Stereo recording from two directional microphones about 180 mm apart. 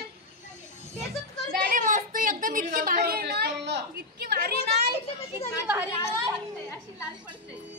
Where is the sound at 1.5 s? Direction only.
50° right (ahead or behind).